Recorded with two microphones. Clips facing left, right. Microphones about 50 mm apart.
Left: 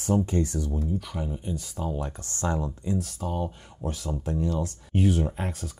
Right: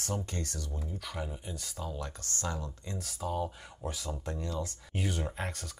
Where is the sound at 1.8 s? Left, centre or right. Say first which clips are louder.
Left 7 dB; left.